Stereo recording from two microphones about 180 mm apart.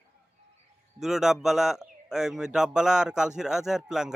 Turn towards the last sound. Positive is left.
turn(degrees=-5)  # may be behind; listen again after turning